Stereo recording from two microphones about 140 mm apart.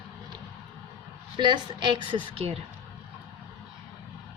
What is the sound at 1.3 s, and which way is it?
Speech, 35° right (ahead or behind).